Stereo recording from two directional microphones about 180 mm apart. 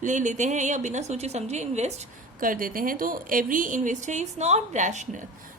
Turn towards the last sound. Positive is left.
turn(degrees=-40)  # may be behind; listen again after turning